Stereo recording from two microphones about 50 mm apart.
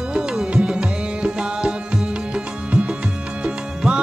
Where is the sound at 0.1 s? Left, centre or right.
Centre.